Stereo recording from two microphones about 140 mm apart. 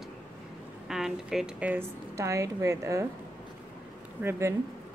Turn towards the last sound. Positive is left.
turn(degrees=-20)  # may be behind; listen again after turning